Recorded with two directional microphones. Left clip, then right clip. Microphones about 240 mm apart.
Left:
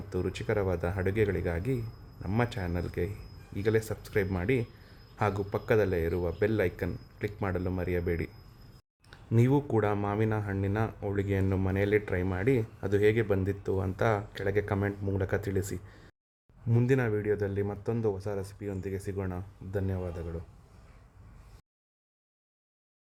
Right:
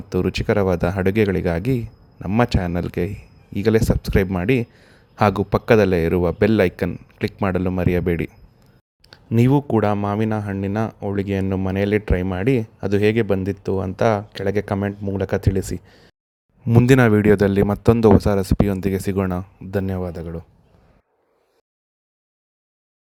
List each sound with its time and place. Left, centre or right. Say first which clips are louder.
0.1 s speech: right 11 dB; right